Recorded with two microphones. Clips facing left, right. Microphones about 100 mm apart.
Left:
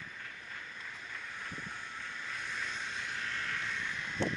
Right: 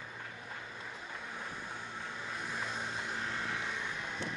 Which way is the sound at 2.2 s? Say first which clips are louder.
Right 1 dB; 15° right (ahead or behind).